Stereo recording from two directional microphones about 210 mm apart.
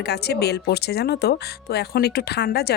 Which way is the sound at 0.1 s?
50° left (ahead or behind).